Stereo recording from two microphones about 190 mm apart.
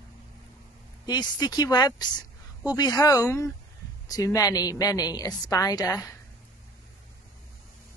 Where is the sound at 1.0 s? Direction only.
20° left (ahead or behind).